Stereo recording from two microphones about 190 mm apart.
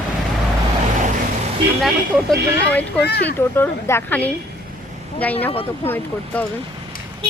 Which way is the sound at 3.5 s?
10° left (ahead or behind).